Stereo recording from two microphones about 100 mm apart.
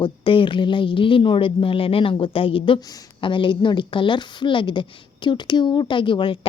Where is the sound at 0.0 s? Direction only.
55° left (ahead or behind).